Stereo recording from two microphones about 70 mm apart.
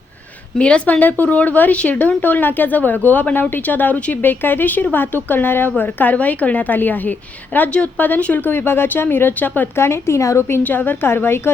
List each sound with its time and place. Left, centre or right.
0.6 s speech: centre
9.8 s a woman's voice: left
10.4 s a woman's voice: left